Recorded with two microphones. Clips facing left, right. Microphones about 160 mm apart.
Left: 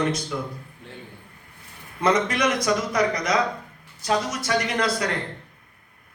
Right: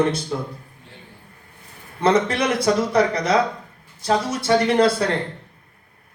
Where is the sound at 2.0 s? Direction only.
30° right (ahead or behind).